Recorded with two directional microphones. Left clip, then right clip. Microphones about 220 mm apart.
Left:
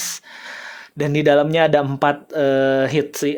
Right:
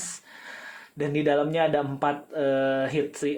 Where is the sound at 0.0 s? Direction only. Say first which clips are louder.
Left 10 dB; 50° left (ahead or behind).